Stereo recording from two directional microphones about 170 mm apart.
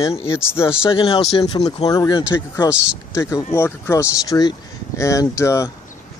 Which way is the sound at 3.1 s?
20° left (ahead or behind).